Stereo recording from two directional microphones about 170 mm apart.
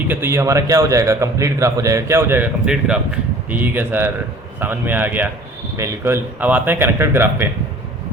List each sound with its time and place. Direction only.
0.1 s a man's voice: 15° right (ahead or behind)